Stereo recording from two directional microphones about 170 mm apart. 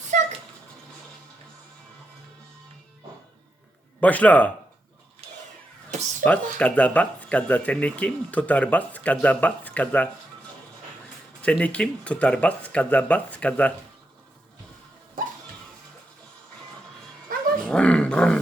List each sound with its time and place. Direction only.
0.1 s a sound: 45° right (ahead or behind)
4.0 s speech: 10° left (ahead or behind)
6.2 s speech: 10° left (ahead or behind)
11.4 s speech: 5° left (ahead or behind)
15.2 s a sound: 55° right (ahead or behind)
17.7 s roar: 5° left (ahead or behind)